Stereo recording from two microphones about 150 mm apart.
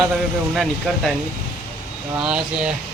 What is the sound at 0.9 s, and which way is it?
Speech, 5° left (ahead or behind).